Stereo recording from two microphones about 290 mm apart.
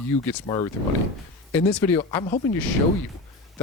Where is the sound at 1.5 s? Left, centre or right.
Centre.